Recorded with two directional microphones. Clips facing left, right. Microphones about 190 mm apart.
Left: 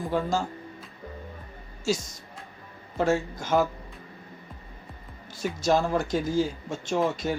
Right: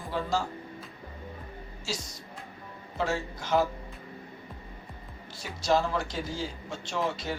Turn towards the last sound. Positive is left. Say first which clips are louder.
# left 5 dB
turn(degrees=50)  # may be behind; listen again after turning